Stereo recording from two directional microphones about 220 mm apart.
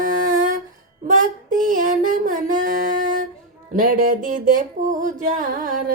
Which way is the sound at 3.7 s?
35° right (ahead or behind).